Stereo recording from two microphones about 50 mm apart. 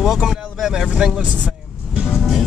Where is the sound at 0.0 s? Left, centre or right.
Centre.